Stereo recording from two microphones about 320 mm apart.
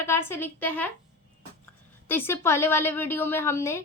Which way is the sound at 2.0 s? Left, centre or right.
Centre.